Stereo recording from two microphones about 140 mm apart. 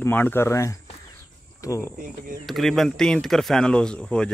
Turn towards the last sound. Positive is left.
turn(degrees=5)  # may be behind; listen again after turning